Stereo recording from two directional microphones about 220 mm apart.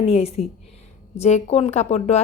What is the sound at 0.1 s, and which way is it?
A woman's voice, 25° left (ahead or behind).